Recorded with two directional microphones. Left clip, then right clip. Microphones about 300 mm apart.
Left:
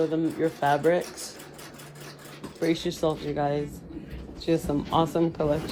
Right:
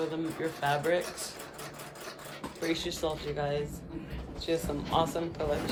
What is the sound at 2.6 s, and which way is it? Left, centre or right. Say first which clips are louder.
Speech: left 6 dB; centre.